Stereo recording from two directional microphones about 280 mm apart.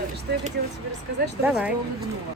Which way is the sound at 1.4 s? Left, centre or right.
Centre.